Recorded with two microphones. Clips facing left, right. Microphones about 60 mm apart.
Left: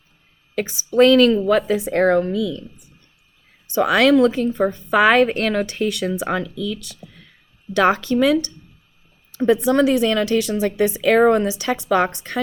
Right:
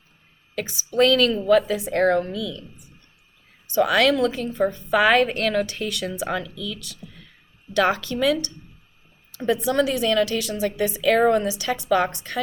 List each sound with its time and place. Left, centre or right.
0.5 s a woman's voice: left
3.8 s a woman's voice: left
11.2 s a woman's voice: left
11.4 s a woman's voice: left